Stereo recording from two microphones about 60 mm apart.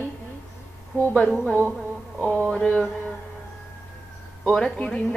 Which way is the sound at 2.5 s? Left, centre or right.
Left.